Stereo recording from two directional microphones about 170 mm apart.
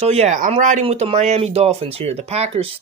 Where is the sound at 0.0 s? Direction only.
40° right (ahead or behind).